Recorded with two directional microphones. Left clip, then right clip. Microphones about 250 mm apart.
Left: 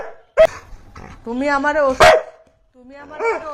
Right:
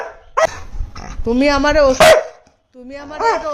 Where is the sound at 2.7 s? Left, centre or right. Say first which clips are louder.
Right 7 dB; right.